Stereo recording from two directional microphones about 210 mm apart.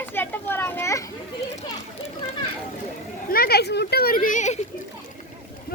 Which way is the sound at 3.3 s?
45° left (ahead or behind).